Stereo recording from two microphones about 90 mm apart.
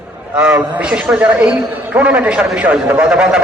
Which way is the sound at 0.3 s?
10° right (ahead or behind).